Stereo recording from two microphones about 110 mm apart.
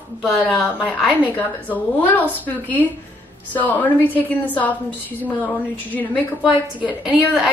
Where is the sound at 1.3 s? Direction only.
15° left (ahead or behind).